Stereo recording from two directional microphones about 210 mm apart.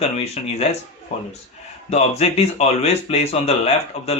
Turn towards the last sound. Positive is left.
turn(degrees=30)  # may be behind; listen again after turning